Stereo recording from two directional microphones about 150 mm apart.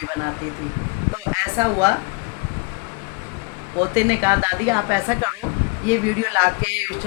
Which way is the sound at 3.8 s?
15° right (ahead or behind).